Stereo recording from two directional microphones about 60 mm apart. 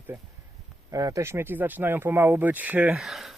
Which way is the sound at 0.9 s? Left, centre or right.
Right.